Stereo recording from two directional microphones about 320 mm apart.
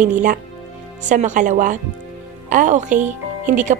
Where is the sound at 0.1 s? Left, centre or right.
Right.